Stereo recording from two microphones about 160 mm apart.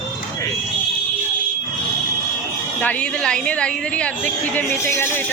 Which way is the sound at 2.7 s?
10° left (ahead or behind).